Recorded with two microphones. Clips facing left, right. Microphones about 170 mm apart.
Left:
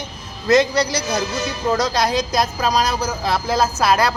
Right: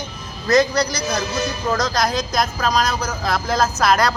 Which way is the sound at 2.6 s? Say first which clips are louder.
Left 1 dB; 10° left (ahead or behind).